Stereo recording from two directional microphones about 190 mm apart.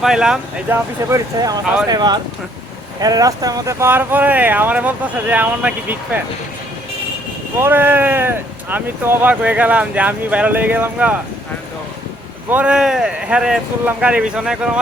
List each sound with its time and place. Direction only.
0.0 s speech: 5° right (ahead or behind)
1.1 s speech: 20° right (ahead or behind)
7.6 s speech: 10° right (ahead or behind)
12.5 s speech: 10° right (ahead or behind)